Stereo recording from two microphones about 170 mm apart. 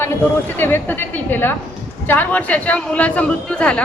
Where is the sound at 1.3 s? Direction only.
10° left (ahead or behind).